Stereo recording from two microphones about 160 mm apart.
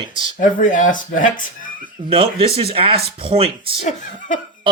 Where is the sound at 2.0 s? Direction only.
35° right (ahead or behind).